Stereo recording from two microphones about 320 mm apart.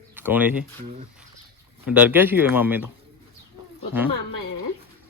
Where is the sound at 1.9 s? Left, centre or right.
Centre.